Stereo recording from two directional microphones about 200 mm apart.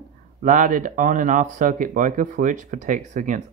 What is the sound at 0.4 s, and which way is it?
Speech, 40° right (ahead or behind).